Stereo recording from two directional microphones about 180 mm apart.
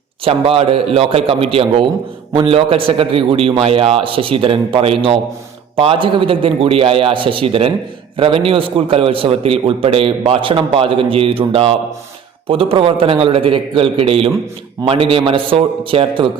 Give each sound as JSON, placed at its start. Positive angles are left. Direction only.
{"t": 0.3, "sound": "a man's voice", "side_deg": -30}